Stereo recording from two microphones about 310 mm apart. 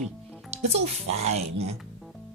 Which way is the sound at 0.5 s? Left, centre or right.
Centre.